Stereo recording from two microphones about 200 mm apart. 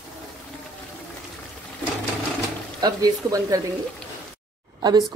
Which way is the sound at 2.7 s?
20° right (ahead or behind).